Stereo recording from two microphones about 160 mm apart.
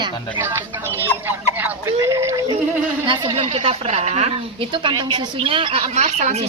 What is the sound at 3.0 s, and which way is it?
Speech, 30° right (ahead or behind).